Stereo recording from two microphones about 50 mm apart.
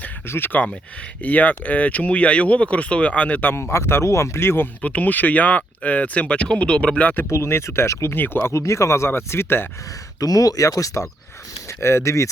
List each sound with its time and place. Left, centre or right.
0.3 s speech: left
1.2 s speech: left
3.5 s speech: left
4.4 s speech: left
4.8 s speech: left
7.3 s speech: left
8.1 s speech: left
8.4 s speech: left
10.7 s speech: left
11.8 s speech: left